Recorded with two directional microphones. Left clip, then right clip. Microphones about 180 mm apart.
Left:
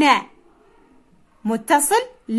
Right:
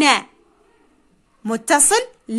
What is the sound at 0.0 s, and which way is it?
Speech, 30° right (ahead or behind).